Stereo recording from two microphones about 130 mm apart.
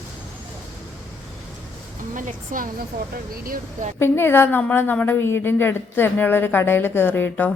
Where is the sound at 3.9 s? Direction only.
20° left (ahead or behind).